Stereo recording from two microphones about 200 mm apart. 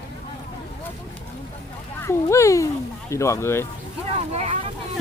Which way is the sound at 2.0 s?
15° left (ahead or behind).